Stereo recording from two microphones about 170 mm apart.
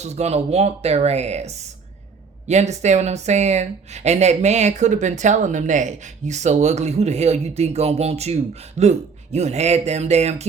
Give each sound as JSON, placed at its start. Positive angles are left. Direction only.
{"t": 0.0, "sound": "speech", "side_deg": -40}